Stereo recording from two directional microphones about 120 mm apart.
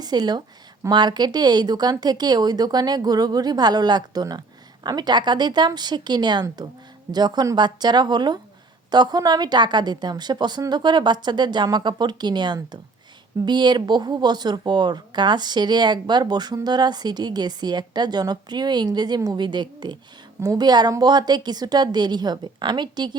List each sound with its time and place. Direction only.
0.0 s a woman's voice: 35° right (ahead or behind)